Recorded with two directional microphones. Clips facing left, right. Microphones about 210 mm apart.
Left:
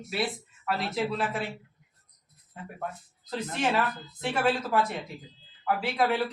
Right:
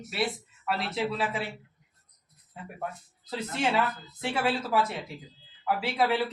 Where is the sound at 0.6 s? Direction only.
Centre (ahead or behind).